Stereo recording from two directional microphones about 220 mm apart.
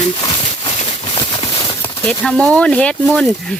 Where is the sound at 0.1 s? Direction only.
20° left (ahead or behind).